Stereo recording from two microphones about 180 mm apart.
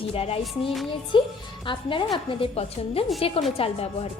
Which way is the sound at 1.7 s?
30° left (ahead or behind).